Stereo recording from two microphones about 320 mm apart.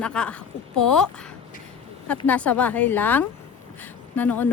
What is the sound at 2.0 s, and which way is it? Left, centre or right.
Speech, centre.